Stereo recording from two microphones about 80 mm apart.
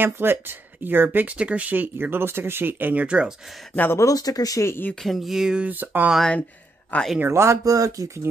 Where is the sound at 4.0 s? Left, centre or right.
Left.